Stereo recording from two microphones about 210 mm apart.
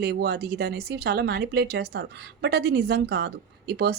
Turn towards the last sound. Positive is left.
turn(degrees=-50)  # may be behind; listen again after turning